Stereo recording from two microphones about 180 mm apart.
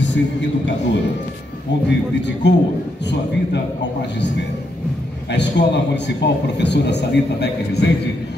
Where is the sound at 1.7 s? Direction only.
75° left (ahead or behind).